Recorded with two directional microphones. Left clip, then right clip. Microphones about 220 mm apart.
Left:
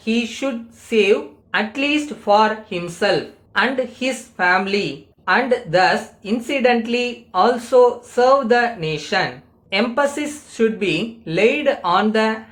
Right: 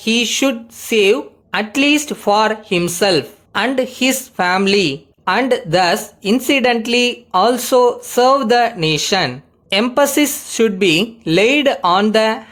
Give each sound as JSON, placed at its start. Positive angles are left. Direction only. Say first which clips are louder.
{"t": 0.0, "sound": "a woman's voice", "louder": "right 7 dB", "side_deg": -45}